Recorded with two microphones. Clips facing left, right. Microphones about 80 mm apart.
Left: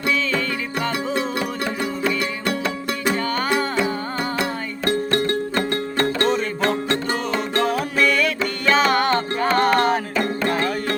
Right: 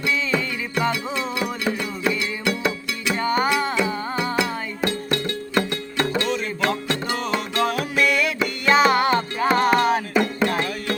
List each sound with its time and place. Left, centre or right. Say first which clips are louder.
0.3 s music: left 1 dB; centre
3.2 s music: right 2 dB; centre
3.8 s music: left 1 dB; left
8.0 s music: left 2 dB; centre